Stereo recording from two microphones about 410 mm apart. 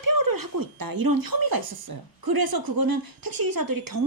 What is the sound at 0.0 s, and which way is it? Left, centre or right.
Speech, right.